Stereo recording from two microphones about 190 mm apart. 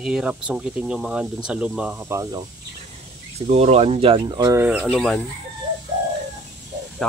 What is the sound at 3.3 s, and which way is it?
Speech, 35° right (ahead or behind).